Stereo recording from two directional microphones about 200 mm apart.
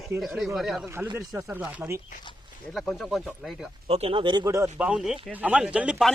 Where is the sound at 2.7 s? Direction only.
Centre (ahead or behind).